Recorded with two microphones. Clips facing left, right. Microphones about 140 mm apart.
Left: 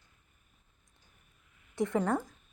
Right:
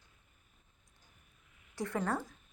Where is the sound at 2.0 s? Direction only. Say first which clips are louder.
Left 4 dB; 15° left (ahead or behind).